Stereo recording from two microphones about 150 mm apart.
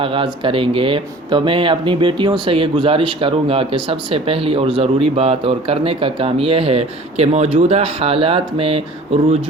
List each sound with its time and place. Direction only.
0.0 s speech: 35° right (ahead or behind)